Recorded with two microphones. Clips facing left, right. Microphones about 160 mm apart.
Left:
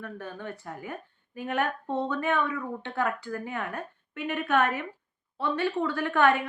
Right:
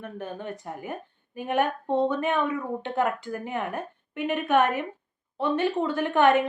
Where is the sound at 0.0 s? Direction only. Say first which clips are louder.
Right 3 dB; 20° right (ahead or behind).